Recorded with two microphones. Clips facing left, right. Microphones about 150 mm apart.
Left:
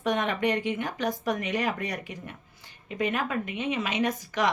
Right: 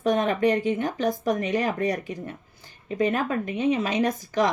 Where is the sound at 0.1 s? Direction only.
35° right (ahead or behind).